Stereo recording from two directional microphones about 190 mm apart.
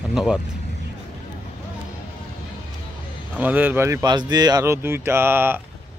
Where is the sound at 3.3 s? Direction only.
10° right (ahead or behind).